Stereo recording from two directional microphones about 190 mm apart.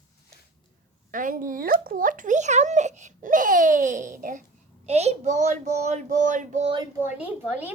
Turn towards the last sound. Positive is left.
turn(degrees=-10)  # may be behind; listen again after turning